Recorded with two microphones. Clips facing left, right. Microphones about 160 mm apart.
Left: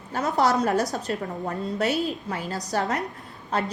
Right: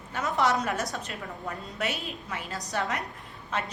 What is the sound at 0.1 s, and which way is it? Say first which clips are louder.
A woman's voice: left 4 dB; 40° left (ahead or behind).